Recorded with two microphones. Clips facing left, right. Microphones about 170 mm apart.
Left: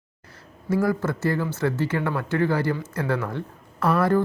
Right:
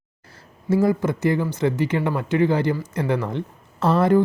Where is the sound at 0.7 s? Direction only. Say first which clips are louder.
Right 4 dB; 20° right (ahead or behind).